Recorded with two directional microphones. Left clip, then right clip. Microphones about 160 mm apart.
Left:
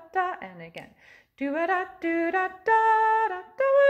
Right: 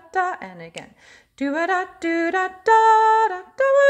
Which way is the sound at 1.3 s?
25° right (ahead or behind).